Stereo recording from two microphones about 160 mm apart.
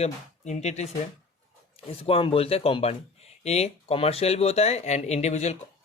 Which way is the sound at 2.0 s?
35° left (ahead or behind).